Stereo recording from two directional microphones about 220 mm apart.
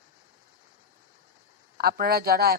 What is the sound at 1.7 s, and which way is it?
Speech, 45° right (ahead or behind).